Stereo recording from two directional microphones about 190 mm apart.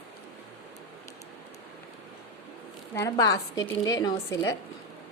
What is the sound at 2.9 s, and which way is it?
A woman's voice, 15° left (ahead or behind).